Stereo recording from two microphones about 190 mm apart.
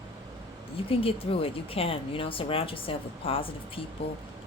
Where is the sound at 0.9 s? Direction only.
30° left (ahead or behind).